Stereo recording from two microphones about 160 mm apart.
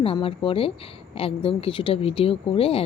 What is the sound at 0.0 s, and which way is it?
Speech, 35° left (ahead or behind).